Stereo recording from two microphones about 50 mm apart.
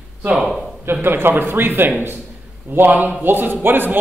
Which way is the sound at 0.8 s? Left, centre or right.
Right.